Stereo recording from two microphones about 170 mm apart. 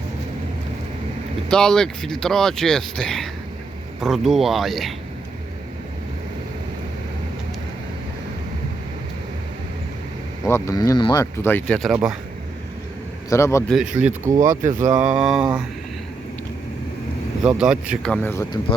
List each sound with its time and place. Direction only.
1.5 s speech: 5° left (ahead or behind)
10.5 s speech: 20° left (ahead or behind)
11.4 s speech: 10° left (ahead or behind)
11.8 s speech: 5° right (ahead or behind)
13.3 s speech: 15° left (ahead or behind)
13.7 s speech: 5° right (ahead or behind)
14.3 s speech: 50° right (ahead or behind)
14.9 s speech: 5° right (ahead or behind)
17.4 s speech: 5° right (ahead or behind)
18.1 s speech: 10° left (ahead or behind)